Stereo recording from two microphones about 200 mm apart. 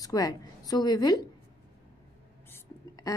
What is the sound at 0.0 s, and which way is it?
A woman's voice, 20° left (ahead or behind).